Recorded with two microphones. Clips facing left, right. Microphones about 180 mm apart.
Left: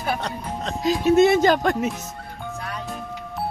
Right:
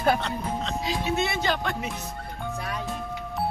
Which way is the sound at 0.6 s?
45° left (ahead or behind).